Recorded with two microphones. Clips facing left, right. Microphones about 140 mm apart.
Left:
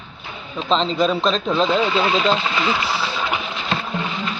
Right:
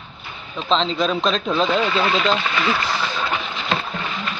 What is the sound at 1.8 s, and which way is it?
Speech, 20° left (ahead or behind).